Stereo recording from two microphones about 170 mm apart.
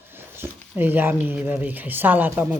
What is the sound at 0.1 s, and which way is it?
Speech, 15° right (ahead or behind).